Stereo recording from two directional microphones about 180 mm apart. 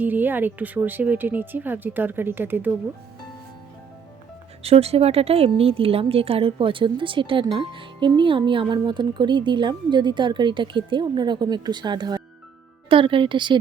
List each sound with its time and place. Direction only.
0.0 s speech: 10° right (ahead or behind)
4.6 s speech: 35° right (ahead or behind)